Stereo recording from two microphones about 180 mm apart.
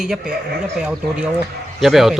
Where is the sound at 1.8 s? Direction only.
Centre (ahead or behind).